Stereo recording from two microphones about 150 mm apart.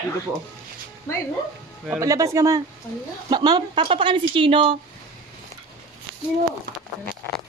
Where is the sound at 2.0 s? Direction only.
20° right (ahead or behind); by 4.8 s 35° right (ahead or behind).